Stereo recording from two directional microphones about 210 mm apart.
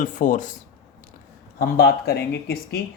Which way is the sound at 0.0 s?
40° left (ahead or behind).